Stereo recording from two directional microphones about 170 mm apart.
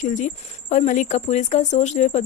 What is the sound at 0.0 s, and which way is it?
Speech, 45° left (ahead or behind).